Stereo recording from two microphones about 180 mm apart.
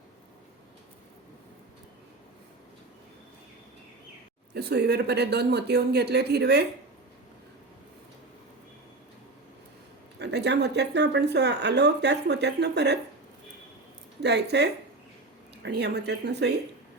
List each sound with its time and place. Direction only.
4.5 s speech: 65° right (ahead or behind)
10.2 s speech: 70° right (ahead or behind)
14.2 s speech: 70° right (ahead or behind)